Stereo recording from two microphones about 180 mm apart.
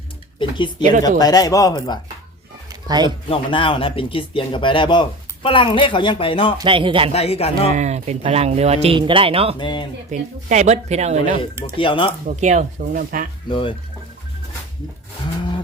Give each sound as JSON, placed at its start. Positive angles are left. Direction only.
{"t": 0.3, "sound": "speech", "side_deg": 25}
{"t": 0.8, "sound": "speech", "side_deg": -45}
{"t": 1.2, "sound": "speech", "side_deg": 20}
{"t": 2.8, "sound": "speech", "side_deg": -20}
{"t": 3.2, "sound": "speech", "side_deg": 30}
{"t": 6.6, "sound": "a man's voice", "side_deg": -30}
{"t": 7.1, "sound": "speech", "side_deg": 35}
{"t": 7.7, "sound": "speech", "side_deg": -40}
{"t": 9.6, "sound": "speech", "side_deg": 25}
{"t": 10.1, "sound": "speech", "side_deg": -40}
{"t": 11.8, "sound": "speech", "side_deg": 30}
{"t": 12.3, "sound": "speech", "side_deg": -40}
{"t": 13.5, "sound": "speech", "side_deg": 30}